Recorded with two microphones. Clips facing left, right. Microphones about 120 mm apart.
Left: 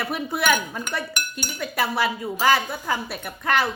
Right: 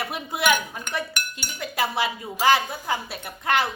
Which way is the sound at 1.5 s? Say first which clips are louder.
Left 1 dB; 20° right (ahead or behind).